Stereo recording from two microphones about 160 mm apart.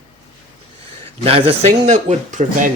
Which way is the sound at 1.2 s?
35° right (ahead or behind).